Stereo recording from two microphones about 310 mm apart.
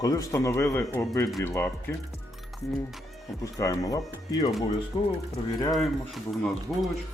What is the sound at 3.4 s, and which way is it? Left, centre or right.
Speech, centre.